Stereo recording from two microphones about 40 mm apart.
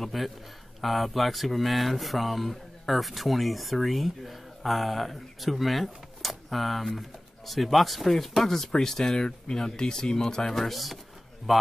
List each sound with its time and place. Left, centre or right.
0.0 s speech: centre
10.5 s speech: centre